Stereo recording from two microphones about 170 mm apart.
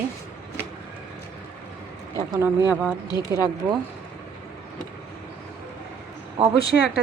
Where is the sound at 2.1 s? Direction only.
20° right (ahead or behind).